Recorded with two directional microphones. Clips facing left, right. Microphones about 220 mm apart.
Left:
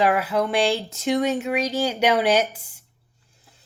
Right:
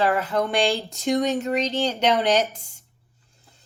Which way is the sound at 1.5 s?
10° left (ahead or behind).